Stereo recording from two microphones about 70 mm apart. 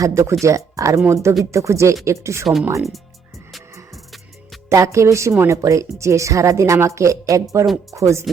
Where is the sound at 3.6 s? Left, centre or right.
Right.